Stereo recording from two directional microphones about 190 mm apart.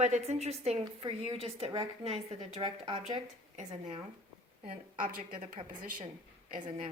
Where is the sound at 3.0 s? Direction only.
35° right (ahead or behind).